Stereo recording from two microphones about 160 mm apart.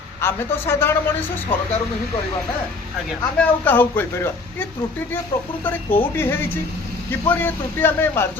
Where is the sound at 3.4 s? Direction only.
10° left (ahead or behind).